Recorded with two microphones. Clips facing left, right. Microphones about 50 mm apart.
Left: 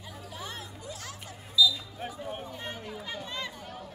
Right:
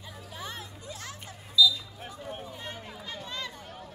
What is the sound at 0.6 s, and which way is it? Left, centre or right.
Music, right.